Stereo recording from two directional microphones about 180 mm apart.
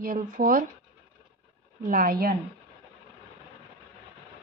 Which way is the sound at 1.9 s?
50° right (ahead or behind).